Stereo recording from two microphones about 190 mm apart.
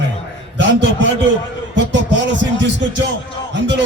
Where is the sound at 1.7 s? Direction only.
70° right (ahead or behind).